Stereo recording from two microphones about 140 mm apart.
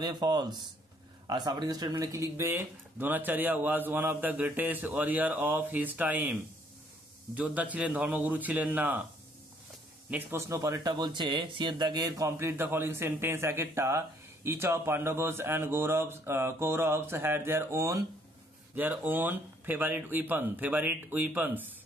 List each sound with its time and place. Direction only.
0.0 s speech: 30° right (ahead or behind); by 6.2 s 10° right (ahead or behind)
7.3 s speech: 10° right (ahead or behind)
10.0 s speech: 10° right (ahead or behind)
10.5 s speech: 25° right (ahead or behind)